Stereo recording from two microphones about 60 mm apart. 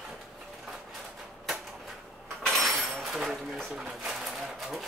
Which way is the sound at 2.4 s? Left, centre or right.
Centre.